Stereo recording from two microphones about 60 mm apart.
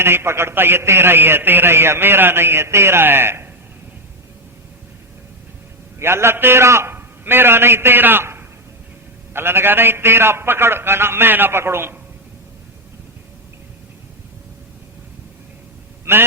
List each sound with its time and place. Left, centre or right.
0.0 s a man's voice: right
6.0 s a man's voice: right
6.9 s a man's voice: right
16.1 s a man's voice: right